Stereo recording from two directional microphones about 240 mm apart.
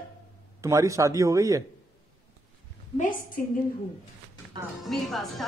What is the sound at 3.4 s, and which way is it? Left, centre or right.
Speech, left.